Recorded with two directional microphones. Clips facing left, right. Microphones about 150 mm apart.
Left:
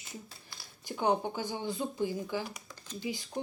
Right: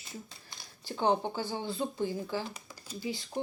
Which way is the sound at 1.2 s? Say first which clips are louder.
Even; 15° left (ahead or behind).